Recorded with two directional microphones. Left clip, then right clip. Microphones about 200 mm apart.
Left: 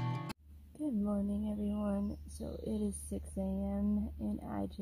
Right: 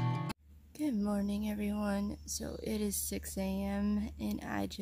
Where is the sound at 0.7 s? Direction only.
20° right (ahead or behind).